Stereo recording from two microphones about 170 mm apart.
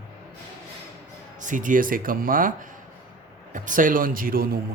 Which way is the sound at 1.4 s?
50° right (ahead or behind).